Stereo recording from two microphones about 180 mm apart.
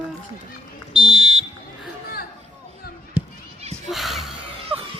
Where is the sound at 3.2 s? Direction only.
10° right (ahead or behind).